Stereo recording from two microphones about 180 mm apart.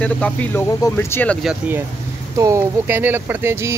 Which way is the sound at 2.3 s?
15° right (ahead or behind).